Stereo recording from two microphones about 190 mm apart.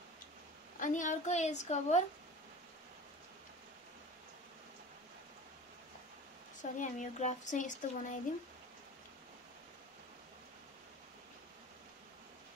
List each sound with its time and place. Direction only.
0.7 s speech: 40° left (ahead or behind)
6.6 s speech: 40° left (ahead or behind)